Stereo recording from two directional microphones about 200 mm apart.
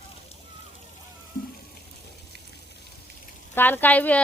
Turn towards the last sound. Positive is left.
turn(degrees=5)  # may be behind; listen again after turning